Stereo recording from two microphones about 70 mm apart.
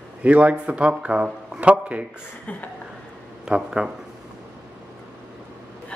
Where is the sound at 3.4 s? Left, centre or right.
Centre.